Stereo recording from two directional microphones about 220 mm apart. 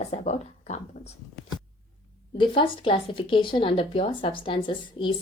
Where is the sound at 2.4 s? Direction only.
20° left (ahead or behind).